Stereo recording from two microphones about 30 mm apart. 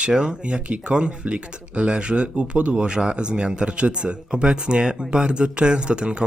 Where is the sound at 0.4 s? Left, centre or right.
Right.